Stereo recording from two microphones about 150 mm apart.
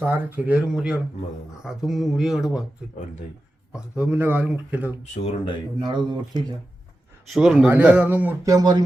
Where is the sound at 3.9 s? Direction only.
10° right (ahead or behind).